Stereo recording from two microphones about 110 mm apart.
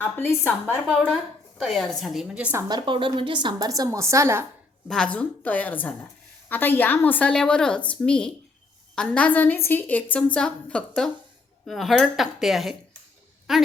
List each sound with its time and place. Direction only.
0.0 s a woman's voice: 20° left (ahead or behind)
1.0 s a woman's voice: centre (ahead or behind)
2.6 s a woman's voice: 45° right (ahead or behind)
3.7 s a woman's voice: 30° right (ahead or behind)
4.9 s a woman's voice: 5° left (ahead or behind)